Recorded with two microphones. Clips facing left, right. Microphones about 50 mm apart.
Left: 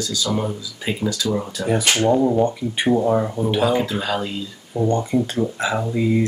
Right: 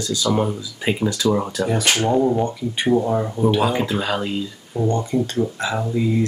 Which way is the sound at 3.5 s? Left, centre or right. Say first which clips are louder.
Left 1 dB; centre.